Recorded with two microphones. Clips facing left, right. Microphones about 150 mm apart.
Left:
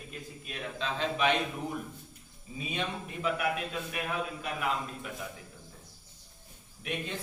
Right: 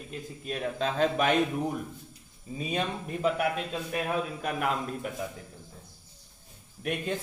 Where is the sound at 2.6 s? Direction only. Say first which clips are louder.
Right 4 dB; 40° right (ahead or behind).